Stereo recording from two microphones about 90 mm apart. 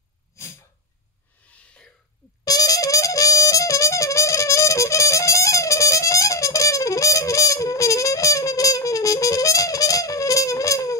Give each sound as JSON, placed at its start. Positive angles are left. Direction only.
{"t": 0.4, "sound": "sneeze", "side_deg": 35}
{"t": 2.4, "sound": "music", "side_deg": 45}